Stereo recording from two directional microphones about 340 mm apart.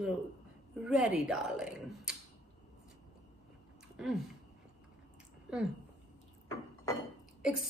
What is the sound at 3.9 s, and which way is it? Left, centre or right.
Speech, centre.